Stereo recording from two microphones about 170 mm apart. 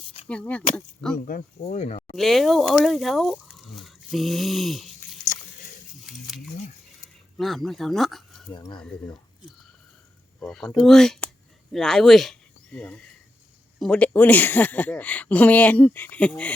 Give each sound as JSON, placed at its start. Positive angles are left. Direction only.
{"t": 0.3, "sound": "speech", "side_deg": 5}
{"t": 1.3, "sound": "speech", "side_deg": 50}
{"t": 2.1, "sound": "speech", "side_deg": 0}
{"t": 6.1, "sound": "speech", "side_deg": 0}
{"t": 8.5, "sound": "speech", "side_deg": 25}
{"t": 10.4, "sound": "speech", "side_deg": 5}